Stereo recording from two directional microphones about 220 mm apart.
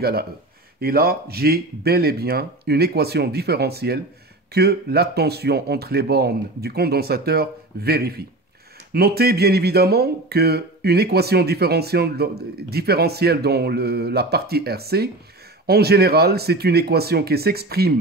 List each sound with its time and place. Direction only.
0.7 s speech: 45° right (ahead or behind)